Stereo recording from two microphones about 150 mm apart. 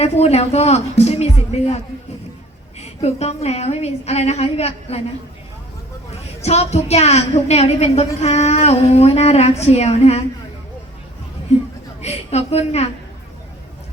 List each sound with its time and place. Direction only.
0.0 s speech: 45° left (ahead or behind)
2.8 s a woman's voice: 45° left (ahead or behind)
6.4 s a woman's voice: 45° left (ahead or behind)
12.0 s a woman's voice: 45° left (ahead or behind)